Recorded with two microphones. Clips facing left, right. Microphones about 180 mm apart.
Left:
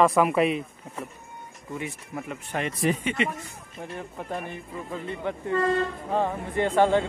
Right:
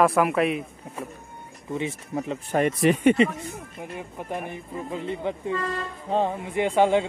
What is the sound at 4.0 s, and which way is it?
Speech, 15° right (ahead or behind).